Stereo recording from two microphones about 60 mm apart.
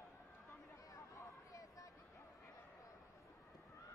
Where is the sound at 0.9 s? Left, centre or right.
Left.